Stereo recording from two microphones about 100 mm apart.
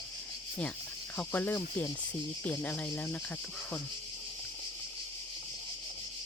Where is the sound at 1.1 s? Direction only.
20° left (ahead or behind).